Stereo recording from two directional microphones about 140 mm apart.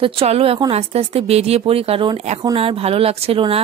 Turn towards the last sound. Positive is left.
turn(degrees=-45)  # may be behind; listen again after turning